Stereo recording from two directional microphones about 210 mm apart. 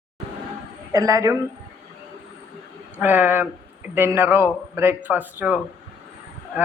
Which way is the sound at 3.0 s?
10° right (ahead or behind).